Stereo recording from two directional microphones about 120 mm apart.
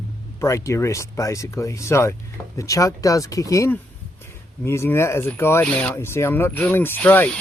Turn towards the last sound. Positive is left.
turn(degrees=15)  # may be behind; listen again after turning